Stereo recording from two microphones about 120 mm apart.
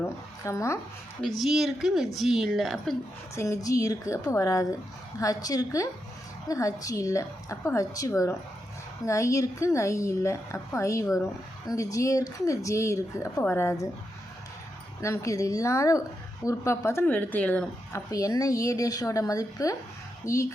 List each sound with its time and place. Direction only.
0.0 s speech: 25° left (ahead or behind)
1.4 s a woman's voice: centre (ahead or behind)
3.3 s a woman's voice: 25° left (ahead or behind)
15.0 s a woman's voice: 25° left (ahead or behind)
17.9 s a woman's voice: 30° left (ahead or behind)